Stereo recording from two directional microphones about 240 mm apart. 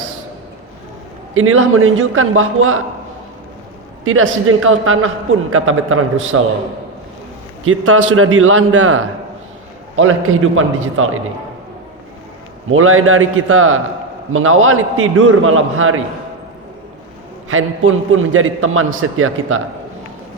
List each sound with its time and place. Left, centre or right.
1.3 s a man's voice: right
4.0 s a man's voice: right
7.6 s a man's voice: right
12.7 s a man's voice: right
17.5 s a man's voice: right